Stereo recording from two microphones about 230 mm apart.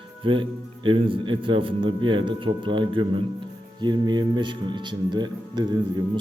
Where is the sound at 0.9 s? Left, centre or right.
Right.